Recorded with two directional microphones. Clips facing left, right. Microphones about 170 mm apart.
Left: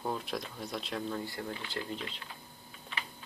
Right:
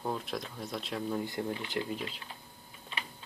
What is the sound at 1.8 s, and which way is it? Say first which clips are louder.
Speech: right 2 dB; 10° right (ahead or behind).